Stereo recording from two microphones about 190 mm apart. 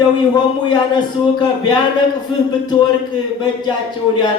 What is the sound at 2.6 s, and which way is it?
Speech, 20° left (ahead or behind).